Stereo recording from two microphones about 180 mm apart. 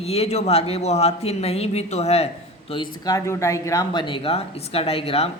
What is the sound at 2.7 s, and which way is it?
A man's voice, 25° left (ahead or behind).